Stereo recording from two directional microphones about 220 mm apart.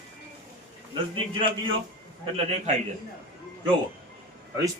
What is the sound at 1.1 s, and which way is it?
A man's voice, 25° right (ahead or behind).